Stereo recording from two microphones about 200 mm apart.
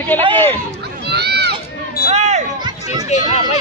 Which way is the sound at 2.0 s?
35° right (ahead or behind).